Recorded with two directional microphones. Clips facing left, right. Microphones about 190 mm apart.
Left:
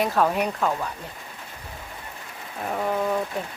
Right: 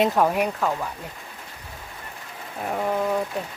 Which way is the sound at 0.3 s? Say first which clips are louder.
Right 1 dB; 10° right (ahead or behind).